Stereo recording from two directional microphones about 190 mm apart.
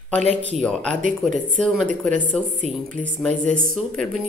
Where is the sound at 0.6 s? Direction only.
5° left (ahead or behind).